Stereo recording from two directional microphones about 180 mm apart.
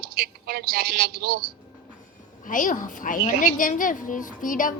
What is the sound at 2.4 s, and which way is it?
A woman's voice, 45° left (ahead or behind).